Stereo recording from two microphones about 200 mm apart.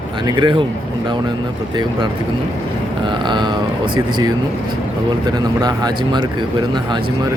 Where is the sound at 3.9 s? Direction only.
20° right (ahead or behind).